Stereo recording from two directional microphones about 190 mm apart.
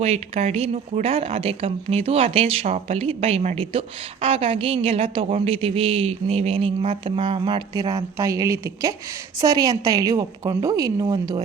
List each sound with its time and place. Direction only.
0.0 s a woman's voice: 35° right (ahead or behind)